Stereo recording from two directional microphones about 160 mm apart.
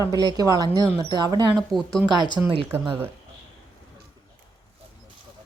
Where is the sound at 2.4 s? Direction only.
15° right (ahead or behind).